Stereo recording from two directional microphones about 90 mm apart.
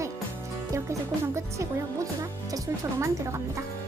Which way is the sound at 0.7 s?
30° right (ahead or behind).